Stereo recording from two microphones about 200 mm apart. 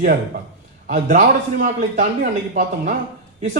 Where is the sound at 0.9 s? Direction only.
40° right (ahead or behind).